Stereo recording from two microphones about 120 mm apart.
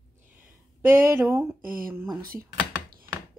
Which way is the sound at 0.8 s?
20° right (ahead or behind).